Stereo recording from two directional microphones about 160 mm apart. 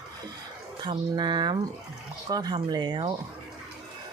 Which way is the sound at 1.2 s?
30° right (ahead or behind).